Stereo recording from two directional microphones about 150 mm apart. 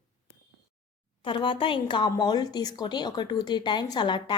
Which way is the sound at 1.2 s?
30° left (ahead or behind).